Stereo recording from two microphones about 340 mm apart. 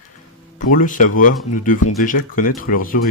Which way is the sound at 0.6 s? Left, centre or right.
Left.